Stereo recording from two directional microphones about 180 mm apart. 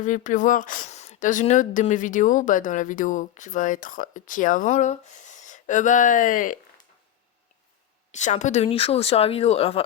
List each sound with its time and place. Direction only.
0.0 s a woman's voice: 45° left (ahead or behind)
8.1 s speech: 40° left (ahead or behind)